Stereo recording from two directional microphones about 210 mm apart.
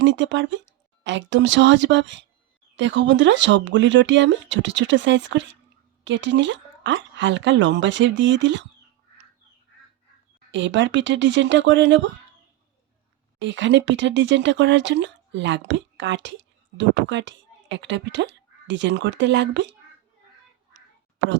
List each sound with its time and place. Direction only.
0.0 s speech: 60° right (ahead or behind)
10.5 s speech: 60° right (ahead or behind)
13.4 s speech: 60° right (ahead or behind)